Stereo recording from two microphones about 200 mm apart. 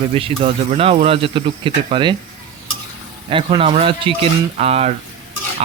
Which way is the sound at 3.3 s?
25° right (ahead or behind).